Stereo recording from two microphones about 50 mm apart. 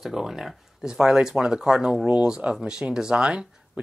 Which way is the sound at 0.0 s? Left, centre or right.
Centre.